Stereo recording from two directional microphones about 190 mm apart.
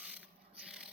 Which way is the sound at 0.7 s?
5° right (ahead or behind).